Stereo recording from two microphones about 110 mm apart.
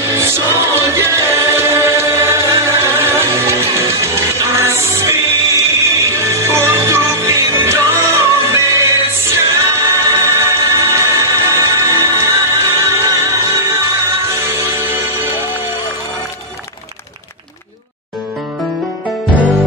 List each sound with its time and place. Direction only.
0.0 s choir: 25° right (ahead or behind)
14.2 s music: 25° right (ahead or behind)